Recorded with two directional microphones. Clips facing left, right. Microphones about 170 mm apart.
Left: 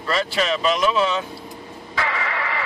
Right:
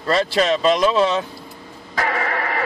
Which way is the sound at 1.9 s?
45° right (ahead or behind).